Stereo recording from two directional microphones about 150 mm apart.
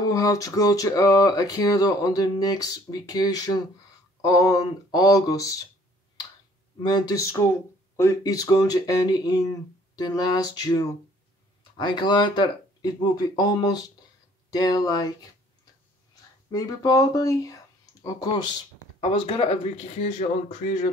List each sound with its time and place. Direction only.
0.0 s speech: 20° left (ahead or behind)
6.8 s speech: 30° left (ahead or behind)
16.4 s speech: 25° left (ahead or behind)
18.9 s speech: 45° left (ahead or behind)